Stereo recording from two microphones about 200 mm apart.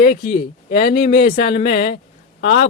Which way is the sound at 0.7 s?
50° left (ahead or behind).